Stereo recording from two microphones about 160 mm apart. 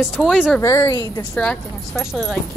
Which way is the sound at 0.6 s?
20° left (ahead or behind).